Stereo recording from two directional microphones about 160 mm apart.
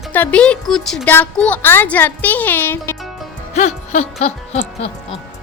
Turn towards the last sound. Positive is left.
turn(degrees=40)  # may be behind; listen again after turning